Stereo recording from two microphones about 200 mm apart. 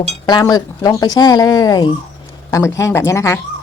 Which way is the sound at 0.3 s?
20° left (ahead or behind).